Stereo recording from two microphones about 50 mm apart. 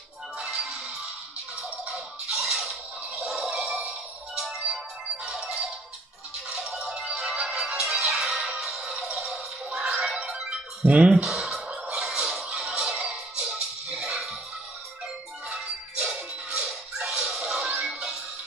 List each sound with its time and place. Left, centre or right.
0.4 s music: centre
2.3 s music: centre
4.4 s ringtone: centre
5.2 s music: centre
9.1 s a sound: centre
10.9 s speech: centre
11.5 s music: centre
11.9 s a sound: centre
12.5 s music: centre
15.5 s music: centre